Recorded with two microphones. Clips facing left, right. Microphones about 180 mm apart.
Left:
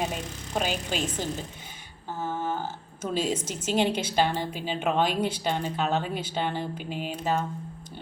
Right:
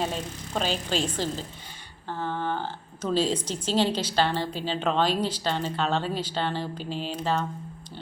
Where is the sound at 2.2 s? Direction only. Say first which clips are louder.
Right 1 dB; 5° left (ahead or behind).